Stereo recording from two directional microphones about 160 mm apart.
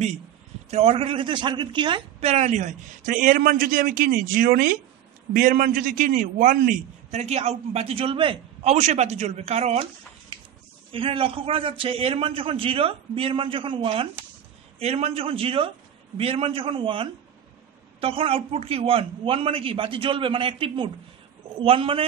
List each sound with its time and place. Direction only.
0.7 s a man's voice: 40° right (ahead or behind)
10.9 s a man's voice: 35° right (ahead or behind)